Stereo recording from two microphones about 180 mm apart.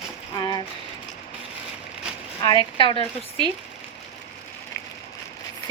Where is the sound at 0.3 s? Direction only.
20° left (ahead or behind).